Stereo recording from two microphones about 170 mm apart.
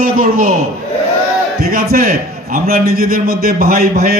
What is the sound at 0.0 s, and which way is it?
Speech, 55° right (ahead or behind).